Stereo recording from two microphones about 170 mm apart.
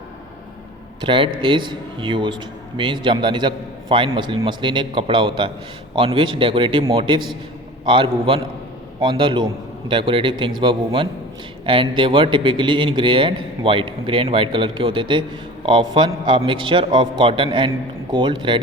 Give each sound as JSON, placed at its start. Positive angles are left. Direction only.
{"t": 1.0, "sound": "a man's voice", "side_deg": -30}